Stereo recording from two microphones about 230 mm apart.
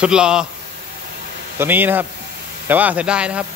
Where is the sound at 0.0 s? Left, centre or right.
Centre.